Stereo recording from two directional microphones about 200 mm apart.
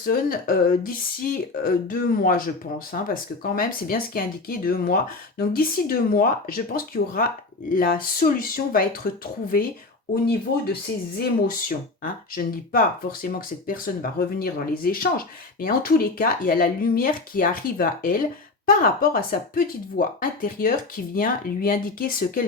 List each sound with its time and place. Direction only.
0.0 s speech: 45° left (ahead or behind)
11.2 s speech: 45° left (ahead or behind)